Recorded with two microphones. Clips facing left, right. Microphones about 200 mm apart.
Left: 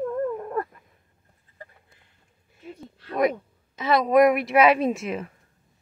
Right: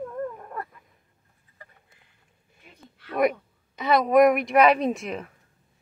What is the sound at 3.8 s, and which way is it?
A woman's voice, centre (ahead or behind).